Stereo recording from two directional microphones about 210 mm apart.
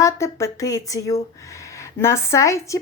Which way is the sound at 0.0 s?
15° left (ahead or behind).